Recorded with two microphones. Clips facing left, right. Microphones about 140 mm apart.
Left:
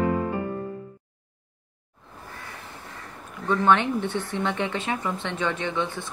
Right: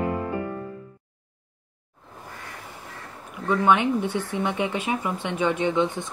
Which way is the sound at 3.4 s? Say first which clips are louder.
Right 1 dB; 10° right (ahead or behind).